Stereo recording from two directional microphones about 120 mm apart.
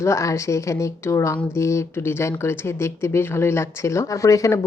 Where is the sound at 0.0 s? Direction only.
25° left (ahead or behind).